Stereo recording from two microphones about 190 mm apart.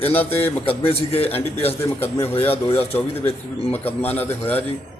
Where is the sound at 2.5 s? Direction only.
30° left (ahead or behind).